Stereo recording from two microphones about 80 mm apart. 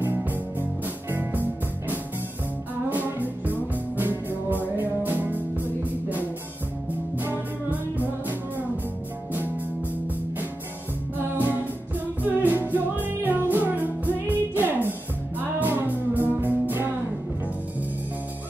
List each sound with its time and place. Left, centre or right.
0.0 s music: right
11.1 s music: right